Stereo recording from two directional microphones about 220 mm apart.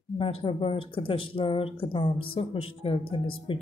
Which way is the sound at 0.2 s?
25° left (ahead or behind).